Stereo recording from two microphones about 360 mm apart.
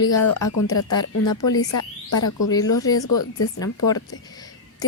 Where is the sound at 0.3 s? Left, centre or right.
Left.